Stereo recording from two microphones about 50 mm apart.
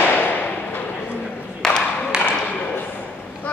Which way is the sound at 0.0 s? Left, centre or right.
Left.